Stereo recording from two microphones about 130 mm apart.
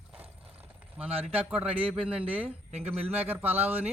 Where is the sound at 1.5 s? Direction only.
10° right (ahead or behind).